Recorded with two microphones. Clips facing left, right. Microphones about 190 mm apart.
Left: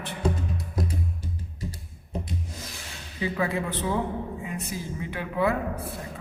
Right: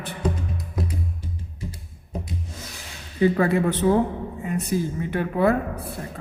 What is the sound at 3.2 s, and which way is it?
Speech, 50° right (ahead or behind).